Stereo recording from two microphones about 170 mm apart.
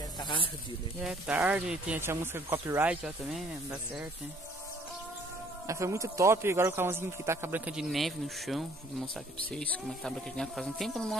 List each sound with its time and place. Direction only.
0.2 s snake: 30° left (ahead or behind)
1.0 s speech: 5° right (ahead or behind)
5.7 s a man's voice: 20° right (ahead or behind); by 11.1 s centre (ahead or behind)